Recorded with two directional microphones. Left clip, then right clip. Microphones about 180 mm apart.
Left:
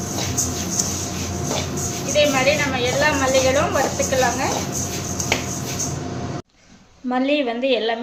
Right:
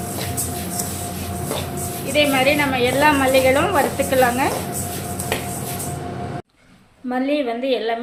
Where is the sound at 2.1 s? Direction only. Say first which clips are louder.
Right 1 dB; 55° right (ahead or behind).